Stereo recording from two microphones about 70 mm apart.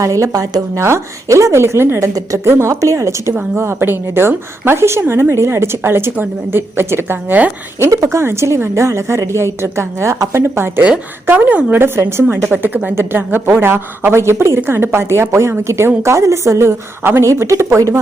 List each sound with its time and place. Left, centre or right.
0.0 s a woman's voice: right
11.3 s a woman's voice: right
11.8 s a woman's voice: right